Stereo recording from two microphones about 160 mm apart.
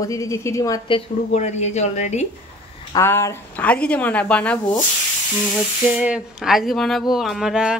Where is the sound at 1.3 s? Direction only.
45° left (ahead or behind).